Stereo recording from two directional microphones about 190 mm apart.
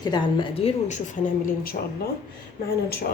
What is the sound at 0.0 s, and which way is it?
A woman's voice, 25° left (ahead or behind).